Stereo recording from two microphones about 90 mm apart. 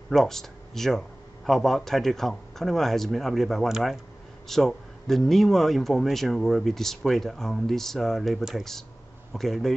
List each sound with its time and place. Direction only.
0.1 s speech: 5° left (ahead or behind)